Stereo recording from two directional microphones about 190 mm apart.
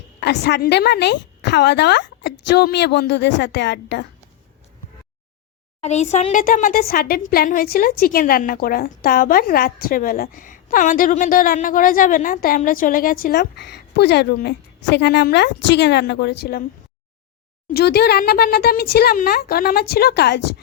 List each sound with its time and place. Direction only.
0.2 s a woman's voice: 60° left (ahead or behind)
5.8 s speech: 35° left (ahead or behind); by 16.6 s 55° left (ahead or behind)
17.7 s a woman's voice: 55° left (ahead or behind)